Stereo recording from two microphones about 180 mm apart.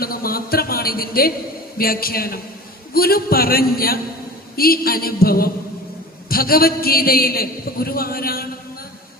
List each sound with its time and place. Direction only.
0.0 s a man's voice: 55° left (ahead or behind)